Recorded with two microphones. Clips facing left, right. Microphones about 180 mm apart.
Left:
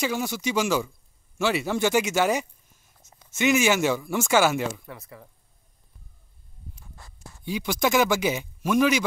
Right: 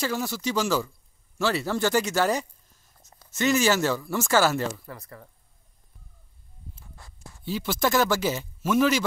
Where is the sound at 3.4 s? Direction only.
20° left (ahead or behind).